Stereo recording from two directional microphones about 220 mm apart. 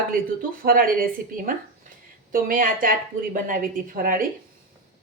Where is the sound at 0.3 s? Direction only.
40° right (ahead or behind).